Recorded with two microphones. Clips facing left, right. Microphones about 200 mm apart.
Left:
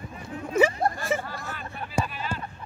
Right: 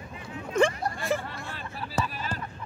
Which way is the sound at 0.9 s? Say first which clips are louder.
Left 5 dB; 50° left (ahead or behind).